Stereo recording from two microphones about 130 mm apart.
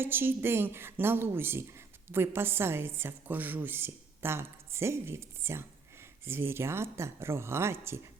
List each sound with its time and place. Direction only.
0.0 s a woman's voice: 15° right (ahead or behind)